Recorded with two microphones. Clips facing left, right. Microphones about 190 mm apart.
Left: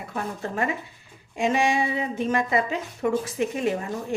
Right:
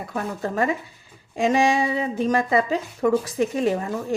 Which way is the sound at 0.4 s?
40° right (ahead or behind).